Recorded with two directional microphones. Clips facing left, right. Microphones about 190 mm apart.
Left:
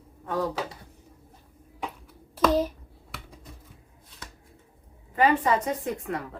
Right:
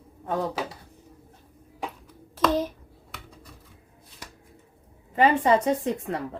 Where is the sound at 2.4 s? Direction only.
10° left (ahead or behind).